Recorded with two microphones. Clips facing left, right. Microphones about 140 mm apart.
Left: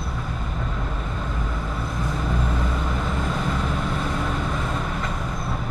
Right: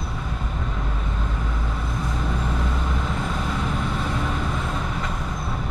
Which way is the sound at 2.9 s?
Centre (ahead or behind).